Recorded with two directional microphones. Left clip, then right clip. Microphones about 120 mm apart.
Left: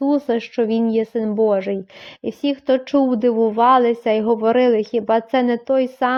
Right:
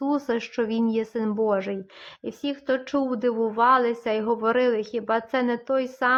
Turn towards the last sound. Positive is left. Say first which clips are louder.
# left 5 dB
turn(degrees=35)  # may be behind; listen again after turning